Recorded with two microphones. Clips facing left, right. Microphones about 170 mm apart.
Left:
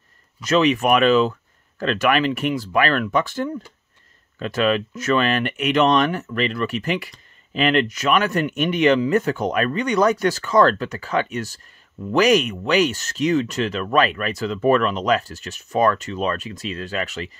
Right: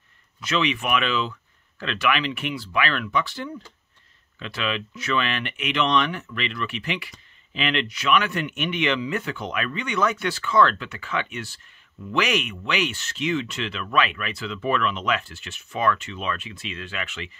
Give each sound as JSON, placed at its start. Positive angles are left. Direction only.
{"t": 0.4, "sound": "speech", "side_deg": 40}